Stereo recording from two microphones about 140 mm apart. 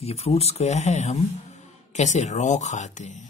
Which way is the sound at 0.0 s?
45° left (ahead or behind).